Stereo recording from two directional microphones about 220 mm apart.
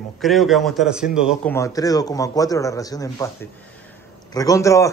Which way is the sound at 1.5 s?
15° left (ahead or behind).